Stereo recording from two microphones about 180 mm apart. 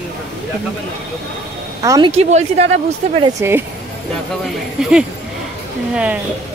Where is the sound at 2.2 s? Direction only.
40° right (ahead or behind).